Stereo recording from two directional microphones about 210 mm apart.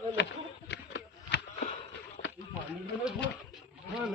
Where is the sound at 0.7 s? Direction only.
55° left (ahead or behind).